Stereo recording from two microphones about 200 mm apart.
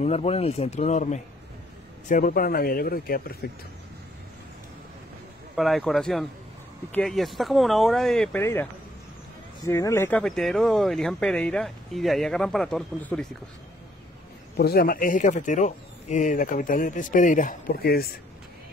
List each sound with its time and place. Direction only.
0.0 s speech: 30° left (ahead or behind); by 3.3 s 50° left (ahead or behind)
5.6 s speech: centre (ahead or behind)
9.7 s speech: 15° left (ahead or behind)
14.6 s speech: 50° left (ahead or behind)